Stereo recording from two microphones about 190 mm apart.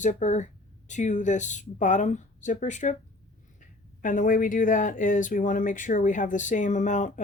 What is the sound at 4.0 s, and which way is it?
Speech, 45° left (ahead or behind).